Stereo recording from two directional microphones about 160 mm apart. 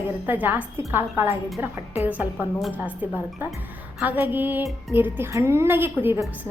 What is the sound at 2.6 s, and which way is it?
A woman's voice, 5° right (ahead or behind).